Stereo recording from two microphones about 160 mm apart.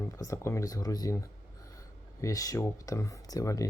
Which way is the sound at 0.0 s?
20° left (ahead or behind).